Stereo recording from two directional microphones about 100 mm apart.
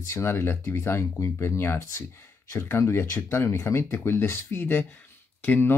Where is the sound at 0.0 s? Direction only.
30° left (ahead or behind).